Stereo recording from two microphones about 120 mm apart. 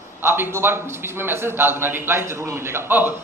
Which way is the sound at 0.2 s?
20° right (ahead or behind).